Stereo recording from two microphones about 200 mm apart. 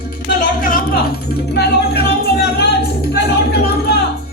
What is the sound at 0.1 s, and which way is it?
Music, 45° left (ahead or behind).